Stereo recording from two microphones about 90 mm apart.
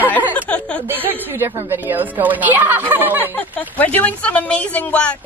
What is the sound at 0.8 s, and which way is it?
A woman's voice, 25° right (ahead or behind).